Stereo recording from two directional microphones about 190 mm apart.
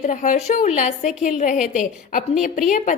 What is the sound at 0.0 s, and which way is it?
A woman's voice, 40° left (ahead or behind).